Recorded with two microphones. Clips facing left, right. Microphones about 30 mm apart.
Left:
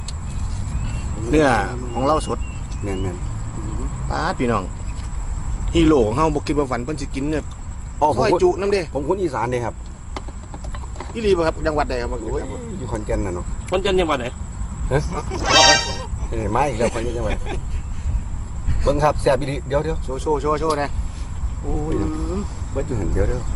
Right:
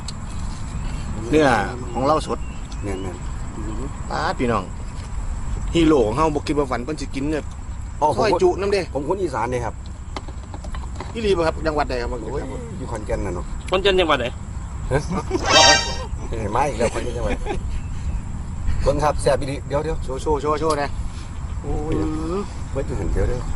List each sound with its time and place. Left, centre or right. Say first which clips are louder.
0.7 s vehicle: left 2 dB; centre
2.0 s speech: even; centre
2.8 s speech: left 2 dB; centre
5.7 s speech: even; centre
10.9 s speech: left 1 dB; centre
13.7 s speech: right 2 dB; right
14.9 s speech: right 1 dB; centre
18.7 s speech: left 1 dB; centre
20.1 s speech: right 1 dB; centre
21.9 s speech: right 1 dB; centre
22.2 s a sound: right 2 dB; centre
22.7 s speech: left 2 dB; centre